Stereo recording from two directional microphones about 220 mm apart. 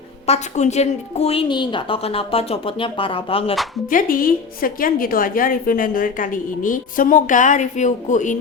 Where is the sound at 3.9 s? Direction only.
40° left (ahead or behind).